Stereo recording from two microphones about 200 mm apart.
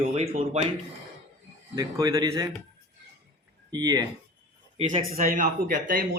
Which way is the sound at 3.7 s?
20° right (ahead or behind).